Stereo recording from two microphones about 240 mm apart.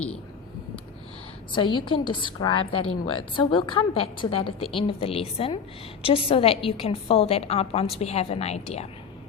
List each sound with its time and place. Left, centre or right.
1.5 s a woman's voice: centre